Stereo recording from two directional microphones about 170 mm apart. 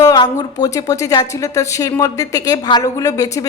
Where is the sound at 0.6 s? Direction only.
20° left (ahead or behind).